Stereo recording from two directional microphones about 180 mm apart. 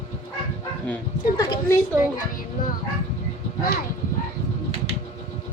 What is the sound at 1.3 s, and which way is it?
Speech, 20° left (ahead or behind).